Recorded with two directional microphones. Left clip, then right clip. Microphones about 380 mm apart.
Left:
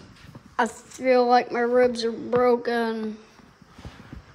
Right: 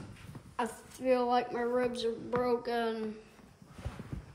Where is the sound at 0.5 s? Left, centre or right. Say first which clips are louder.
Left 11 dB; centre.